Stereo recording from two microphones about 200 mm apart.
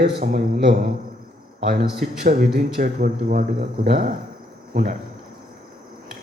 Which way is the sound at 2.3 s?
45° right (ahead or behind).